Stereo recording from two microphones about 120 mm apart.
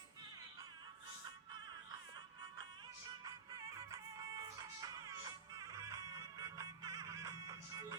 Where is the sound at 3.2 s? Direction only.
30° right (ahead or behind).